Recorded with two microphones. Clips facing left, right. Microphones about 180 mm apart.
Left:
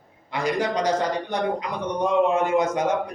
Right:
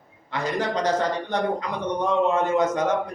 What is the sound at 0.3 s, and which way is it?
A man's voice, 10° left (ahead or behind).